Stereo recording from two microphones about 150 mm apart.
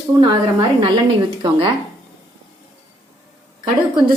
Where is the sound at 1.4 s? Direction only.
35° right (ahead or behind).